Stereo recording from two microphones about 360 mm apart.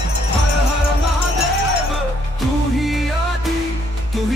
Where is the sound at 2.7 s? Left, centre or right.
Centre.